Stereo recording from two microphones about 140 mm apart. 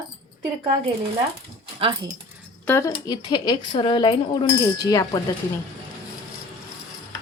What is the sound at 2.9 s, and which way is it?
Speech, 30° left (ahead or behind).